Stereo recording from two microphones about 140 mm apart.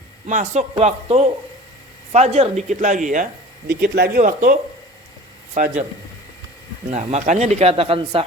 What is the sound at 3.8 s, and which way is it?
Speech, 80° right.